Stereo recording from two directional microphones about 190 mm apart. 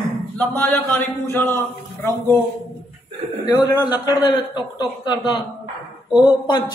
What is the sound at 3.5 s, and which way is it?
A man's voice, 20° left (ahead or behind).